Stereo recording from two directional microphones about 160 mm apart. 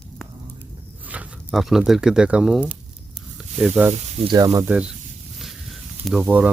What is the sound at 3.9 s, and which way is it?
Speech, 30° right (ahead or behind).